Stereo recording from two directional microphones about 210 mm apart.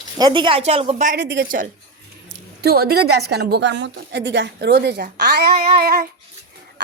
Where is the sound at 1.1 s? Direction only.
55° right (ahead or behind).